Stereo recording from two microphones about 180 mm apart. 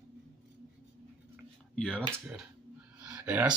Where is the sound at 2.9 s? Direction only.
10° right (ahead or behind).